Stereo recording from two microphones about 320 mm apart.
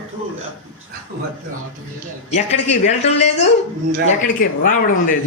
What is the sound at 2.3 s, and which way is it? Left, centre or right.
Speech, left.